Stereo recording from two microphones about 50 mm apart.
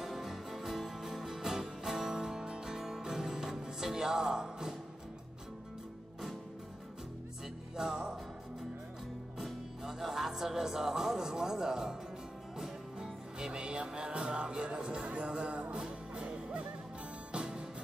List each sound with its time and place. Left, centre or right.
0.0 s music: centre
7.7 s music: centre
9.4 s music: centre